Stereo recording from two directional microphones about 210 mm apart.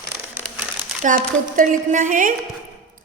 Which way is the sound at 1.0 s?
40° right (ahead or behind).